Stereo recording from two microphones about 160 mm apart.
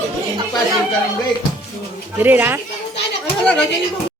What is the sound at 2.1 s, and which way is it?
Speech, 10° right (ahead or behind).